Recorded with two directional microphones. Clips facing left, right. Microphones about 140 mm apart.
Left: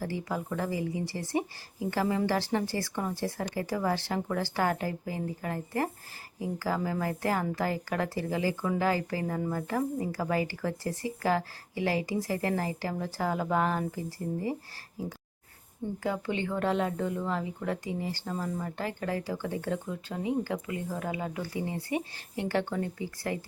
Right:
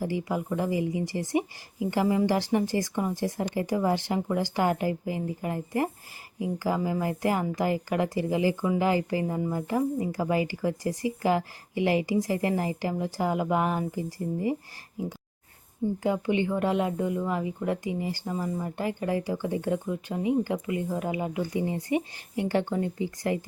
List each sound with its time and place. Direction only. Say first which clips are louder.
0.0 s speech: right 4 dB; 15° right (ahead or behind)
16.0 s speech: right 5 dB; 15° right (ahead or behind)